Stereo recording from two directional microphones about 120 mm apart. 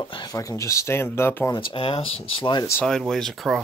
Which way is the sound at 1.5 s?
45° left (ahead or behind).